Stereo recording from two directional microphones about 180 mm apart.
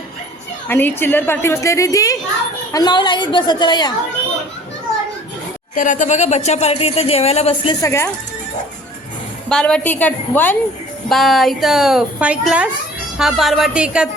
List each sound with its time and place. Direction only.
0.7 s a woman's voice: 10° left (ahead or behind)
5.7 s speech: 45° left (ahead or behind)
7.8 s a woman's voice: 15° left (ahead or behind)
9.5 s a woman's voice: 5° left (ahead or behind)